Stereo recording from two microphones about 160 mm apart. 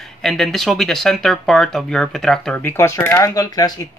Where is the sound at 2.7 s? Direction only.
15° left (ahead or behind).